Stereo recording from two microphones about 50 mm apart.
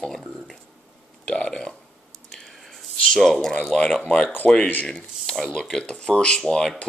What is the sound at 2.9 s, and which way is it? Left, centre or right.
Speech, centre.